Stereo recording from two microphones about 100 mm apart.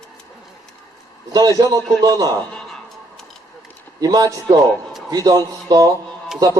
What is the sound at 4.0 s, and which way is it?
A man's voice, 40° right (ahead or behind).